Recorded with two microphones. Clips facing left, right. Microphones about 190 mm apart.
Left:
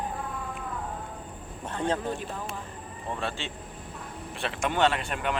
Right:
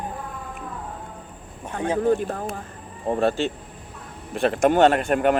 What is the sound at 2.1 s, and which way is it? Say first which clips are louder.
A man's voice: right 11 dB; 50° right (ahead or behind).